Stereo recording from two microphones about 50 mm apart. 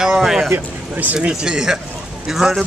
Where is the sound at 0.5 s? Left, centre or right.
Right.